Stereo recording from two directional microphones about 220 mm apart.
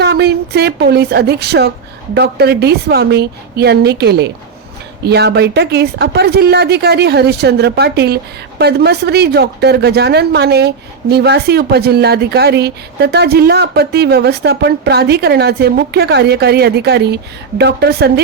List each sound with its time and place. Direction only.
0.0 s a woman's voice: 50° right (ahead or behind)